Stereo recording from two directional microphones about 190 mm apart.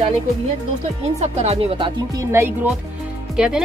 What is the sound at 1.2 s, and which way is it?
Speech, 35° right (ahead or behind).